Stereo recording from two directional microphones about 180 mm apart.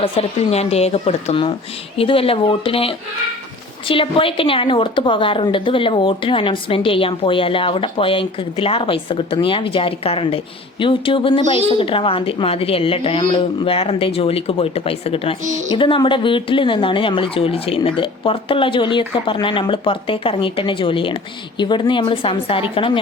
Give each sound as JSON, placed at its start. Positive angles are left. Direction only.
{"t": 0.0, "sound": "a woman's voice", "side_deg": 35}